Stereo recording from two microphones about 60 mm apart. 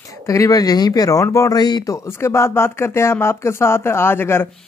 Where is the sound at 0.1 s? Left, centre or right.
Left.